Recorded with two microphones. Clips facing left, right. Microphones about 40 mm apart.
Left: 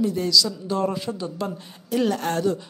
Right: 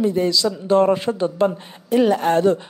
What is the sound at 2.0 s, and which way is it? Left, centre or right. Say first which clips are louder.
Speech: right 7 dB; right.